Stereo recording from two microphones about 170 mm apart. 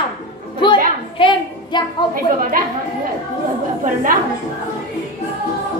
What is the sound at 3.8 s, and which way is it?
Speech, 50° right (ahead or behind).